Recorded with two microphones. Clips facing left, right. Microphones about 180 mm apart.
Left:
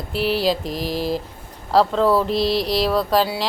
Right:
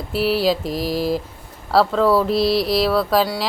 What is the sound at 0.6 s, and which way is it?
Speech, 40° right (ahead or behind).